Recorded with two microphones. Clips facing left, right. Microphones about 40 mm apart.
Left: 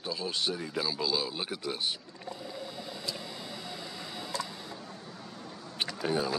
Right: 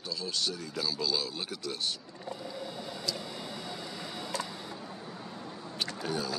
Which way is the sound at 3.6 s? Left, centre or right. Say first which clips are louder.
Right 1 dB; centre.